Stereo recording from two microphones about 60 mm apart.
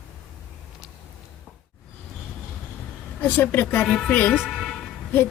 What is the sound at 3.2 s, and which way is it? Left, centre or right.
Speech, left.